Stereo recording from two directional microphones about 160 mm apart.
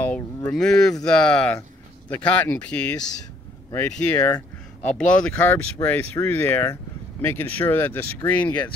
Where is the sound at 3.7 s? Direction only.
20° left (ahead or behind).